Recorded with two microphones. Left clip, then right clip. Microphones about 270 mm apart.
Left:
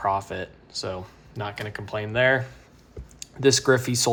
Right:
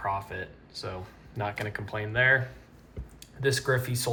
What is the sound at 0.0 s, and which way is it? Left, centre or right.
Speech, centre.